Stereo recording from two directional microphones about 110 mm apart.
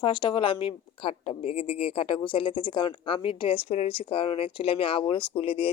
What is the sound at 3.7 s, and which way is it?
Speech, 70° left (ahead or behind).